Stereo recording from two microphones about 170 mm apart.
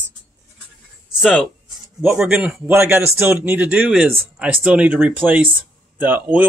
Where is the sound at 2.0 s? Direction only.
10° right (ahead or behind).